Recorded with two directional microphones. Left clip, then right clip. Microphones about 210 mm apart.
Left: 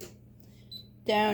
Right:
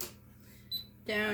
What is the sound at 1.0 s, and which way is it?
Speech, 30° left (ahead or behind).